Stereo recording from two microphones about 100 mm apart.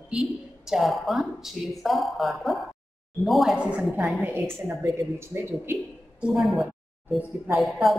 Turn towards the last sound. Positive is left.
turn(degrees=0)  # may be behind; listen again after turning